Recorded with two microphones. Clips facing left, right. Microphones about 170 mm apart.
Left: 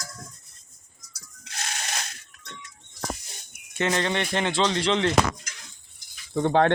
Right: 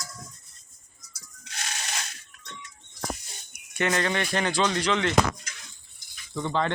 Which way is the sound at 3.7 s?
25° left (ahead or behind).